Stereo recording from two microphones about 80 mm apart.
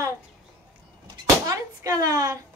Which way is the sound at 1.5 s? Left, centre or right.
Right.